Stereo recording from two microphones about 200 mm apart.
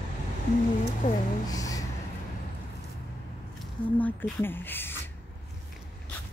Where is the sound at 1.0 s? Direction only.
40° left (ahead or behind).